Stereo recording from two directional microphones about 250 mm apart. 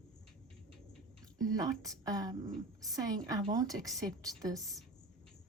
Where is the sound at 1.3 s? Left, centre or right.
Centre.